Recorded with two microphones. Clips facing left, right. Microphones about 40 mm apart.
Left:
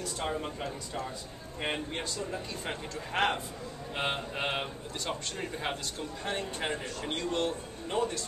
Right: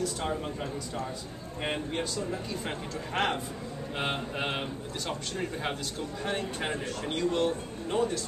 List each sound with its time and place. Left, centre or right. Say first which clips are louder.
0.0 s a man's voice: right 2 dB; centre